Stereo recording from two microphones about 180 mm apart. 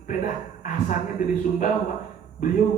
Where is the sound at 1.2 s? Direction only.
45° left (ahead or behind).